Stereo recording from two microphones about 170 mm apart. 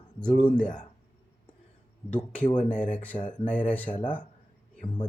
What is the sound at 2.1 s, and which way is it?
Speech, 10° left (ahead or behind).